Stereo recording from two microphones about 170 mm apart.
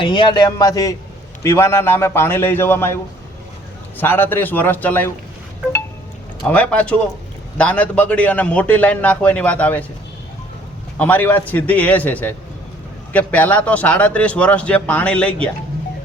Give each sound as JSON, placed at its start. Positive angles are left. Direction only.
{"t": 0.0, "sound": "speech", "side_deg": 30}
{"t": 6.5, "sound": "speech", "side_deg": 10}
{"t": 10.9, "sound": "speech", "side_deg": 10}